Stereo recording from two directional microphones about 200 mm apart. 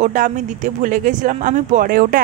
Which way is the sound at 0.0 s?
40° right (ahead or behind).